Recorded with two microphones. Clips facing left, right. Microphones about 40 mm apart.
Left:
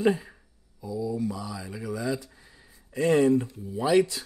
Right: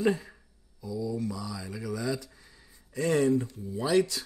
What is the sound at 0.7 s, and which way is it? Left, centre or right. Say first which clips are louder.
Mantra: left 2 dB; left.